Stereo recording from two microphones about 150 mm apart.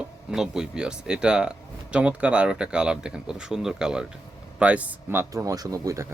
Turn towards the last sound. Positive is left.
turn(degrees=-20)  # may be behind; listen again after turning